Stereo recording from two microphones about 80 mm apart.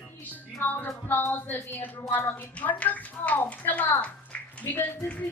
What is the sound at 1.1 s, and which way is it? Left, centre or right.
A woman's voice, left.